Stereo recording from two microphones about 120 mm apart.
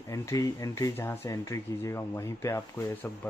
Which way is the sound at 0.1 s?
25° left (ahead or behind).